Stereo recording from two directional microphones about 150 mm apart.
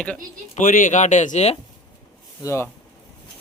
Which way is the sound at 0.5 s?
65° left (ahead or behind).